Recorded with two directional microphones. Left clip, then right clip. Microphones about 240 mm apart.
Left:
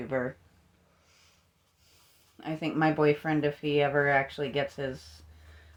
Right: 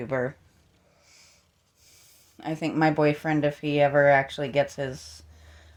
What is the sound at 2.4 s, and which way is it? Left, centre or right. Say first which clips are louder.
Speech: right 4 dB; right.